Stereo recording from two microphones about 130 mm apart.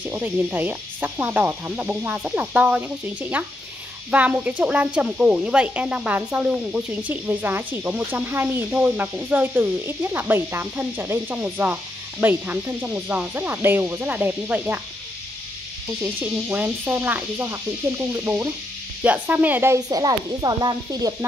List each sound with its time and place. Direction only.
0.0 s speech: 15° right (ahead or behind)
16.0 s speech: 15° right (ahead or behind); by 21.1 s 30° right (ahead or behind)